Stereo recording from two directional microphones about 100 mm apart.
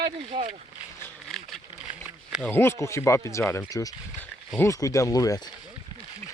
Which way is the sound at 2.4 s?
20° left (ahead or behind).